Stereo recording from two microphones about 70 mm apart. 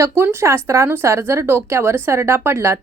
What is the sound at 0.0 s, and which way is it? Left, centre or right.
Speech, right.